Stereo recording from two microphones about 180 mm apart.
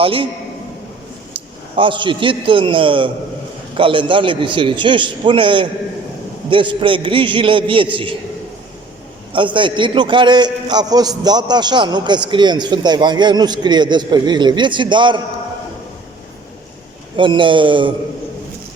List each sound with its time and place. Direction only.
0.0 s a man's voice: 30° right (ahead or behind)
1.3 s a man's voice: 30° right (ahead or behind)
9.3 s a man's voice: 25° right (ahead or behind)
17.2 s a man's voice: 25° right (ahead or behind)